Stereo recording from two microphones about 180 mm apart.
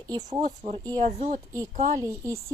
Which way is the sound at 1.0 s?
45° right (ahead or behind).